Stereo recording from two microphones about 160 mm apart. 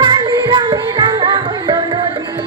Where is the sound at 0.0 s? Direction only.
30° right (ahead or behind).